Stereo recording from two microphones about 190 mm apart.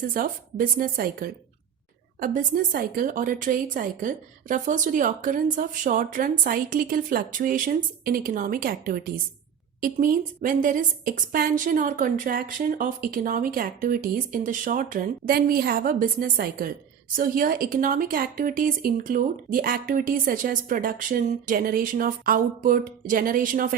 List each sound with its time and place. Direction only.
0.1 s a woman's voice: 45° right (ahead or behind)